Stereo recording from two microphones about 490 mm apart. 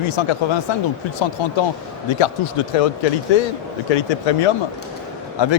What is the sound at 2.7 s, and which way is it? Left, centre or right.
Speech, left.